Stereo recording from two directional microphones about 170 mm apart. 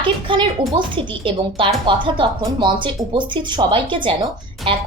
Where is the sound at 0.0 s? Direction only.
30° right (ahead or behind).